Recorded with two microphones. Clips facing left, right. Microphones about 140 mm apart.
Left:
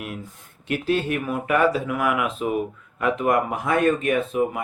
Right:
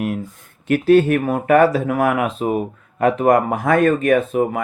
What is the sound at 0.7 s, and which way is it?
Speech, 50° right (ahead or behind).